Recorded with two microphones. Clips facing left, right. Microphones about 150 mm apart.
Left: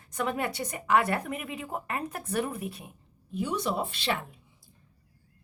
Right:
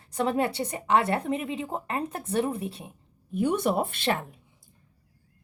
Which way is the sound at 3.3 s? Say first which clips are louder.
Right 5 dB; 55° right (ahead or behind).